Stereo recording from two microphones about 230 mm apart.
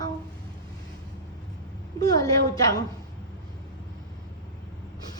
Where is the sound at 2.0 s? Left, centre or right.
Centre.